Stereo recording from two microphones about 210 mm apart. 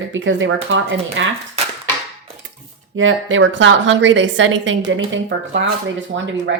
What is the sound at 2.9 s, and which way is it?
A woman's voice, 65° right (ahead or behind).